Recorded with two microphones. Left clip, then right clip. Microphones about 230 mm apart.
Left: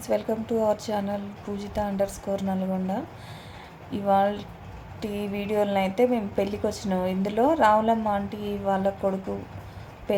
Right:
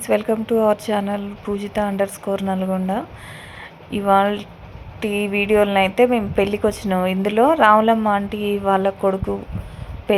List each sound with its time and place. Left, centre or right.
0.0 s a woman's voice: centre